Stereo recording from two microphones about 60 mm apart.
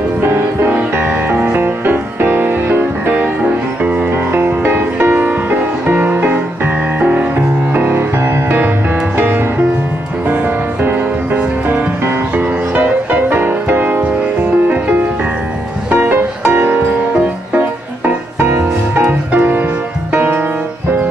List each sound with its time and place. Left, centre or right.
0.2 s music: right
4.1 s music: right
12.1 s music: right
15.9 s music: right
17.6 s music: right